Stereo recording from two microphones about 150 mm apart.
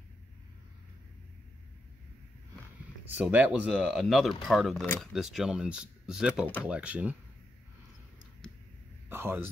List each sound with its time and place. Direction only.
3.1 s speech: 10° right (ahead or behind)
3.7 s speech: 5° left (ahead or behind)
8.4 s a sound: 5° left (ahead or behind)
9.1 s speech: 15° right (ahead or behind)